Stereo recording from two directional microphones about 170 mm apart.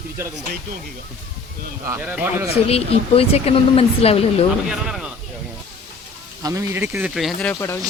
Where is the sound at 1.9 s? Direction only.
10° right (ahead or behind).